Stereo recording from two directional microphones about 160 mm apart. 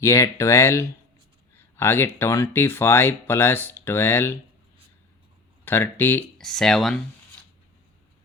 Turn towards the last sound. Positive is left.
turn(degrees=0)  # may be behind; listen again after turning